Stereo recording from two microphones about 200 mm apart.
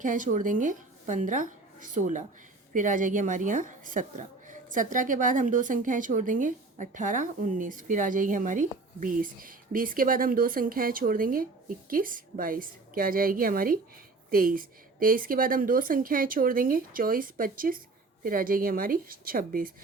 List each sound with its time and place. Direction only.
0.0 s a woman's voice: 40° right (ahead or behind)